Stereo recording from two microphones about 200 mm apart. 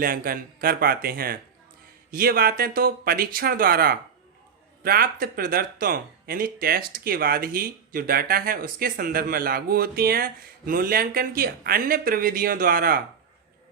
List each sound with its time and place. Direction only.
0.0 s speech: 45° right (ahead or behind)